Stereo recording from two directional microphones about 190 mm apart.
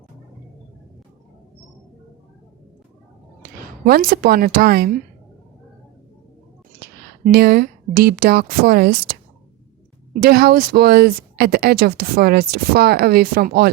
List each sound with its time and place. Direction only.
3.8 s speech: 55° right (ahead or behind)
6.7 s speech: 55° right (ahead or behind)
10.2 s speech: 55° right (ahead or behind)